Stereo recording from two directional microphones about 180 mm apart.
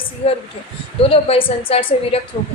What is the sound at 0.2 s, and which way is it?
A woman's voice, 35° left (ahead or behind).